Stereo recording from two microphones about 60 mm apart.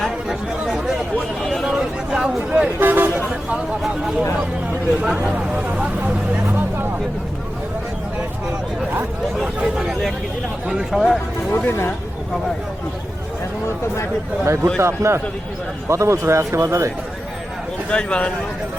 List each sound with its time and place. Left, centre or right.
0.3 s chatter: centre
1.5 s a sound: centre
2.8 s vehicle: right
5.0 s speech: centre
9.6 s a sound: centre
10.7 s speech: centre
11.5 s speech: left
14.4 s speech: right
17.8 s speech: centre